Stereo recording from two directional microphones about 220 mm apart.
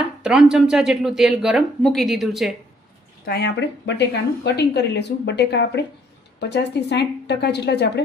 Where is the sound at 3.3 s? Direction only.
50° left (ahead or behind).